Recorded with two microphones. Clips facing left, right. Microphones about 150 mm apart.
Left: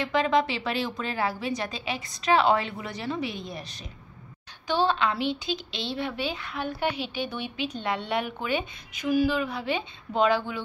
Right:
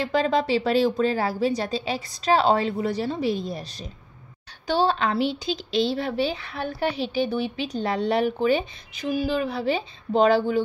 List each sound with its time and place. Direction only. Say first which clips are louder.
0.0 s a woman's voice: right 2 dB; 35° right (ahead or behind)
4.8 s a woman's voice: right 2 dB; 40° right (ahead or behind)